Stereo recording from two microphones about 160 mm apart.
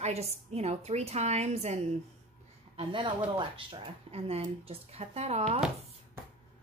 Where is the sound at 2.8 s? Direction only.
35° right (ahead or behind).